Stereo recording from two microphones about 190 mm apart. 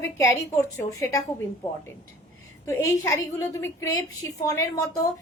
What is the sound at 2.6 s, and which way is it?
A woman's voice, 15° left (ahead or behind).